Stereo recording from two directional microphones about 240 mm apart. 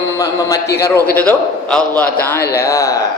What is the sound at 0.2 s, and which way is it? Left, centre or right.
A man's voice, centre.